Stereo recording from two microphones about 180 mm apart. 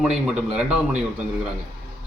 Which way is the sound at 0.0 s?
5° right (ahead or behind).